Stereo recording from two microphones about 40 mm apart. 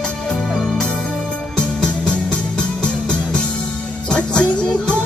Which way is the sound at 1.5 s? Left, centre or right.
Left.